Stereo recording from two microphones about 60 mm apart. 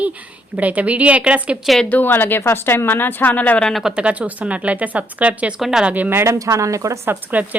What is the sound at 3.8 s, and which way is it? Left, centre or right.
A woman's voice, centre.